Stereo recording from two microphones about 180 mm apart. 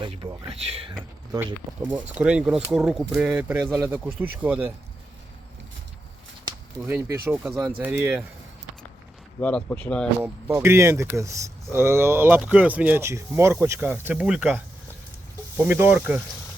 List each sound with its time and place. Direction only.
0.0 s speech: 25° right (ahead or behind)
1.8 s speech: 10° right (ahead or behind)
6.4 s a sound: 15° right (ahead or behind)
7.3 s speech: 10° right (ahead or behind)
9.4 s speech: 5° left (ahead or behind)
10.2 s speech: 15° right (ahead or behind)